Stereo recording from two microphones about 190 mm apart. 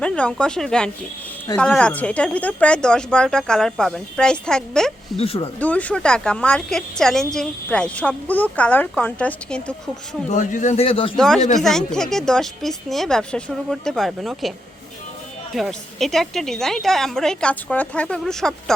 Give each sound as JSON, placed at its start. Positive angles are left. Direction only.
{"t": 0.0, "sound": "speech", "side_deg": 5}
{"t": 5.1, "sound": "a man's voice", "side_deg": 30}
{"t": 5.5, "sound": "speech", "side_deg": 5}
{"t": 10.2, "sound": "a man's voice", "side_deg": 40}
{"t": 11.3, "sound": "a man's voice", "side_deg": 40}
{"t": 11.6, "sound": "speech", "side_deg": 5}
{"t": 15.5, "sound": "speech", "side_deg": 0}